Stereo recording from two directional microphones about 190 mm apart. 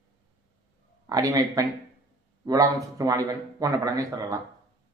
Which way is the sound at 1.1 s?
20° right (ahead or behind).